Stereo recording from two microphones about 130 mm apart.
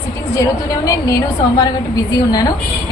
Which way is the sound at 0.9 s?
25° left (ahead or behind).